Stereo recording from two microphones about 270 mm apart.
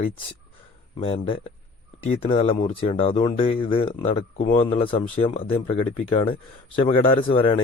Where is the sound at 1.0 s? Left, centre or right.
Centre.